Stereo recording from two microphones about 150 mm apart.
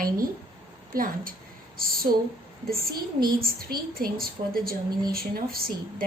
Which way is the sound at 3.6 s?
85° right.